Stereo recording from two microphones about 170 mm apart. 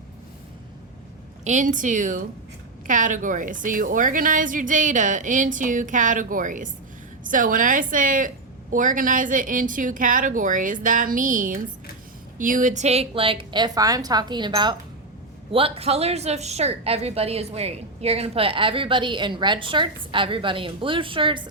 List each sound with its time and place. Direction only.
1.5 s a woman's voice: 50° right (ahead or behind); by 21.5 s 30° right (ahead or behind)